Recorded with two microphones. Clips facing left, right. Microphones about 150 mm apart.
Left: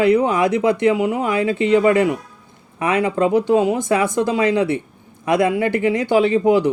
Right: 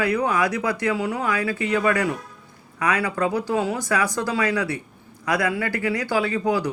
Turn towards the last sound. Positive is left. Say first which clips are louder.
# left 8 dB
turn(degrees=25)  # may be behind; listen again after turning